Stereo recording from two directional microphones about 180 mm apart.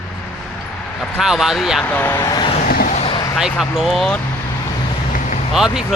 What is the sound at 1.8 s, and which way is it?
Speech, 10° left (ahead or behind).